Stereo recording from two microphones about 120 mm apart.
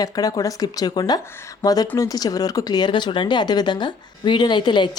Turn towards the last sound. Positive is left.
turn(degrees=40)  # may be behind; listen again after turning